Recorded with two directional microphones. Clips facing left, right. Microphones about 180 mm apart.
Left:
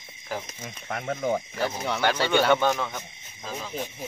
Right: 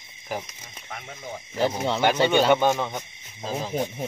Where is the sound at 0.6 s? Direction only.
60° left (ahead or behind).